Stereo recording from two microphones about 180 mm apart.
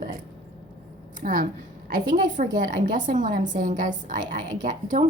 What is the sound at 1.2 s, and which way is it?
A woman's voice, 50° right (ahead or behind).